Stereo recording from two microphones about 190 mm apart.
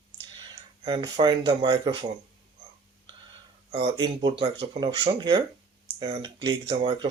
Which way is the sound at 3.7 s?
25° right (ahead or behind).